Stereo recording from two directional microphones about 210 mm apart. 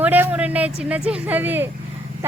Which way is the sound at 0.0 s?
10° right (ahead or behind).